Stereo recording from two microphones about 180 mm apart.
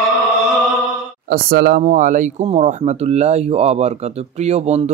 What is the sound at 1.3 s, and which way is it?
Speech, 55° right (ahead or behind).